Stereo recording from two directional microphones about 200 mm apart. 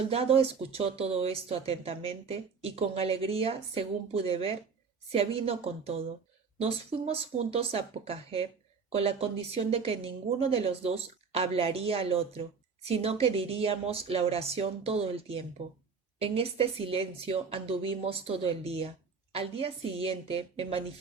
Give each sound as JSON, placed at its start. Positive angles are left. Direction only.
{"t": 0.1, "sound": "a woman's voice", "side_deg": -30}